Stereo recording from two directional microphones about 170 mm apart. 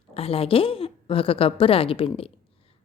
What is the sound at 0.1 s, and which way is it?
A woman's voice, 35° left (ahead or behind).